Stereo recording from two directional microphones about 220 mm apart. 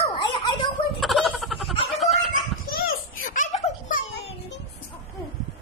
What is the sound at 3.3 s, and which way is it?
Baby laughter, 35° left (ahead or behind).